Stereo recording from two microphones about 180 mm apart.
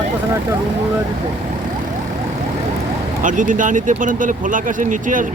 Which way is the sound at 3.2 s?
45° right (ahead or behind).